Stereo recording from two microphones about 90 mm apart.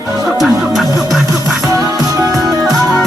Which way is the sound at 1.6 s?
40° right (ahead or behind).